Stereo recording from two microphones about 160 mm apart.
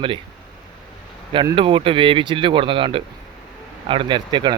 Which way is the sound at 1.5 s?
35° right (ahead or behind).